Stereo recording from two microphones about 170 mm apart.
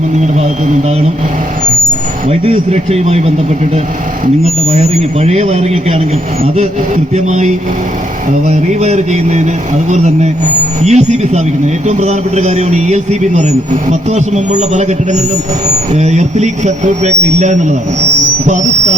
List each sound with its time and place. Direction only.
2.3 s a man's voice: 35° right (ahead or behind)
4.4 s a man's voice: 40° right (ahead or behind)
6.6 s a man's voice: 40° right (ahead or behind)